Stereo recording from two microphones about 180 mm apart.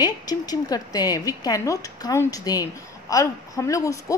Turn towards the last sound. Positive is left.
turn(degrees=15)  # may be behind; listen again after turning